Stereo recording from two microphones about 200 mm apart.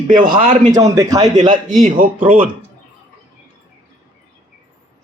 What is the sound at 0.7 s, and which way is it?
Speech, 15° right (ahead or behind).